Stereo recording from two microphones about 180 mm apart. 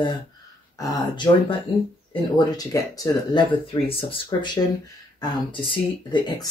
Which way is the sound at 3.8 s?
30° left (ahead or behind).